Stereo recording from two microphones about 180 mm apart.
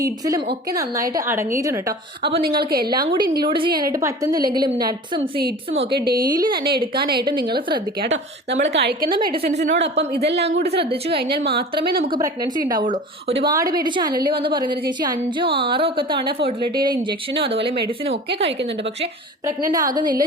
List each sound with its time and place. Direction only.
0.0 s a woman's voice: 20° right (ahead or behind)
2.2 s a woman's voice: 60° right (ahead or behind)
3.4 s a woman's voice: 25° right (ahead or behind)
5.9 s a woman's voice: 60° right (ahead or behind)
6.3 s a woman's voice: 20° right (ahead or behind)
7.0 s a woman's voice: 60° right (ahead or behind)
8.7 s speech: 70° right (ahead or behind)
9.4 s speech: 40° right (ahead or behind)
9.7 s a woman's voice: 75° right (ahead or behind); by 12.0 s 60° right (ahead or behind)
12.6 s a woman's voice: 20° right (ahead or behind)
12.9 s speech: 35° right (ahead or behind)
13.5 s a woman's voice: 20° right (ahead or behind)
19.7 s a woman's voice: 20° right (ahead or behind)